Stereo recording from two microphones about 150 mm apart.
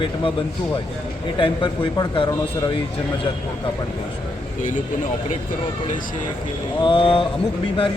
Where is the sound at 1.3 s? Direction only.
35° left (ahead or behind).